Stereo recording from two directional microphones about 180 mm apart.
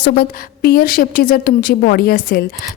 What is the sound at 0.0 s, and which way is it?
A woman's voice, 60° left (ahead or behind).